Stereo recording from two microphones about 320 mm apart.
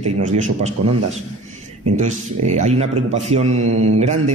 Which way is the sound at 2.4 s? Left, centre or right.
Right.